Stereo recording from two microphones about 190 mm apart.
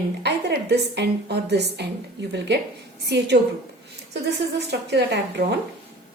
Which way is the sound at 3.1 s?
60° right (ahead or behind).